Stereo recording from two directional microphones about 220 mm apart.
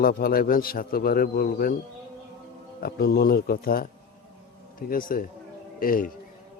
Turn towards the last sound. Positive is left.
turn(degrees=40)  # may be behind; listen again after turning